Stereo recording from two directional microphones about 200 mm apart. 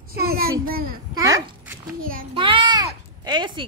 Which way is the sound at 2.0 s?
45° right (ahead or behind).